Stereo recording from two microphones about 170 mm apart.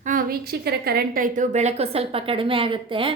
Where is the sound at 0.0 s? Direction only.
55° right (ahead or behind).